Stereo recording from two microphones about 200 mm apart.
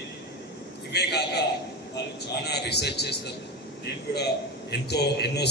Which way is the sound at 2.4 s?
55° left (ahead or behind).